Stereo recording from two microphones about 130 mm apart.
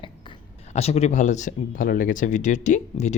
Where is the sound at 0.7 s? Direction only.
55° left (ahead or behind).